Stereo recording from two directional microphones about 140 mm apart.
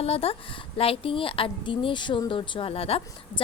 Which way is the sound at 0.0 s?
45° left (ahead or behind).